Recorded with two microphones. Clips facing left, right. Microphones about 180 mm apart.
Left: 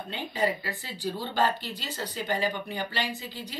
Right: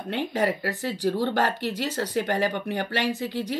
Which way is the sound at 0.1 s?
75° right (ahead or behind).